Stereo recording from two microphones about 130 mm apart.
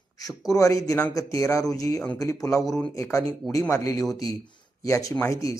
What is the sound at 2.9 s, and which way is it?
A man's voice, 25° left (ahead or behind).